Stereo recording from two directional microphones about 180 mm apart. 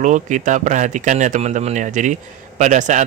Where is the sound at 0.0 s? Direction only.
45° right (ahead or behind).